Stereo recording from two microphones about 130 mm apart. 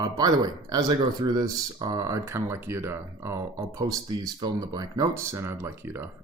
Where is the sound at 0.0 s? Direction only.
30° right (ahead or behind).